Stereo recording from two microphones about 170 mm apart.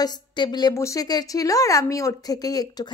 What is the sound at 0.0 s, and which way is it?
A woman's voice, 25° left (ahead or behind).